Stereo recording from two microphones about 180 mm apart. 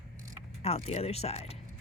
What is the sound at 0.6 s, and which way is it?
Speech, 35° left (ahead or behind).